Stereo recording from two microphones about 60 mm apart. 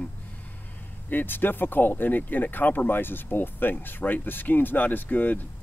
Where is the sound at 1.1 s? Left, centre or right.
Left.